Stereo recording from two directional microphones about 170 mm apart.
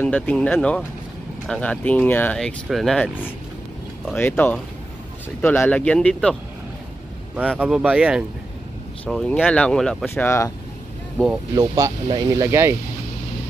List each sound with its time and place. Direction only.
0.0 s speech: 10° left (ahead or behind)
4.2 s speech: 10° left (ahead or behind)
7.5 s speech: 10° right (ahead or behind)
9.0 s speech: 5° left (ahead or behind)
10.0 s speech: 15° left (ahead or behind)
11.5 s speech: 20° right (ahead or behind)